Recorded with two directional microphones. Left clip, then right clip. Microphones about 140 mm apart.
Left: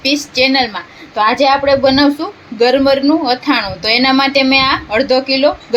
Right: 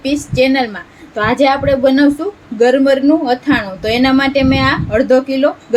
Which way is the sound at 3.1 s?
70° right (ahead or behind).